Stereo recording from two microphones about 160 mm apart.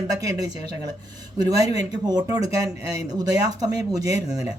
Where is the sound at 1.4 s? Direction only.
25° right (ahead or behind).